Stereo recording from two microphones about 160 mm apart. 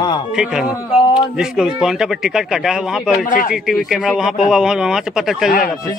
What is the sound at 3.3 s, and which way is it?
Speech, 60° left (ahead or behind).